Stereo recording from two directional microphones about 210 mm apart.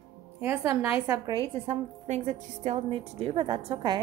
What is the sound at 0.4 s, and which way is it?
Speech, 10° right (ahead or behind).